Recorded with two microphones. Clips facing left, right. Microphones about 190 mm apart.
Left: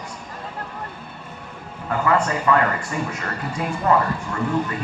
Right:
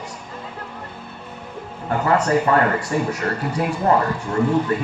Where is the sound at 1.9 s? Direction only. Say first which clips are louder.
Right 2 dB; 35° right (ahead or behind).